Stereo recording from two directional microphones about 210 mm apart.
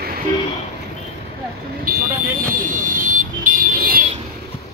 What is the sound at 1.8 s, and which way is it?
Vehicle, 40° right (ahead or behind).